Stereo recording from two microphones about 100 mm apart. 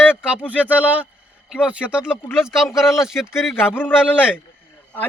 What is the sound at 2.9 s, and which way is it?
Speech, 5° right (ahead or behind).